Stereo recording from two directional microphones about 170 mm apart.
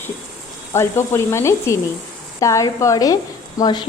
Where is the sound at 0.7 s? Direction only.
15° left (ahead or behind).